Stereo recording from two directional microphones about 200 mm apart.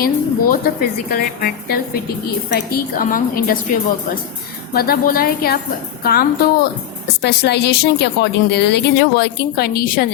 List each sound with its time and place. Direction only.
0.0 s speech: 45° left (ahead or behind)
4.7 s speech: 50° left (ahead or behind)